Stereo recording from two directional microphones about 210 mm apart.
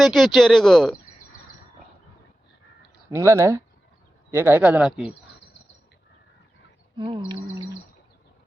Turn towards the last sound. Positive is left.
turn(degrees=-25)  # may be behind; listen again after turning